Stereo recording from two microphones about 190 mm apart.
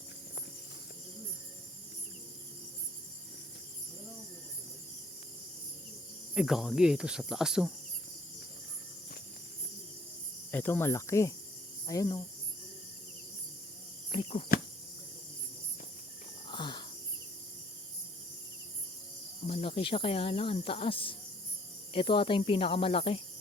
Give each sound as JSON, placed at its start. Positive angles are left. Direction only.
{"t": 6.3, "sound": "cricket", "side_deg": 0}
{"t": 10.5, "sound": "speech", "side_deg": 10}
{"t": 14.1, "sound": "speech", "side_deg": 30}
{"t": 16.5, "sound": "a sound", "side_deg": 25}
{"t": 19.5, "sound": "speech", "side_deg": 30}